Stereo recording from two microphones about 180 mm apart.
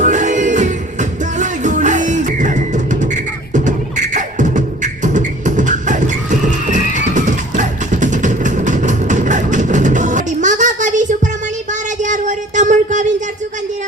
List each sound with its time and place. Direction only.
0.0 s music: 45° right (ahead or behind)
3.5 s beatboxing: 45° right (ahead or behind)
12.0 s a sound: 45° right (ahead or behind)